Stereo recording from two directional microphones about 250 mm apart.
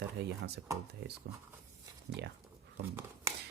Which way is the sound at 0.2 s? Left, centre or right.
Right.